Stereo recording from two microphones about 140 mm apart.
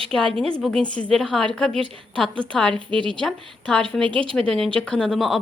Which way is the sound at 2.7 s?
35° right (ahead or behind).